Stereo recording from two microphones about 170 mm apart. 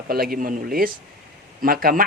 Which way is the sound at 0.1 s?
60° right (ahead or behind).